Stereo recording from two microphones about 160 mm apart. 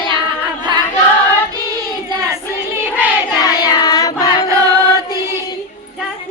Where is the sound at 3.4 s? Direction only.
25° left (ahead or behind).